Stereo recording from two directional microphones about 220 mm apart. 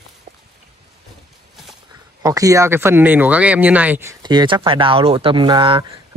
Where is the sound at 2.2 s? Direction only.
15° right (ahead or behind).